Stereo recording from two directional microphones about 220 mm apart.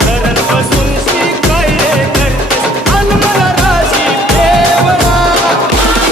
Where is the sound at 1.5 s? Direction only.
Centre (ahead or behind).